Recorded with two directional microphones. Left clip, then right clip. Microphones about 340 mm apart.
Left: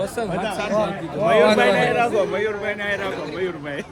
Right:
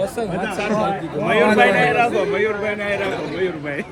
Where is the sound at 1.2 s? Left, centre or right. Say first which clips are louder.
Even; left.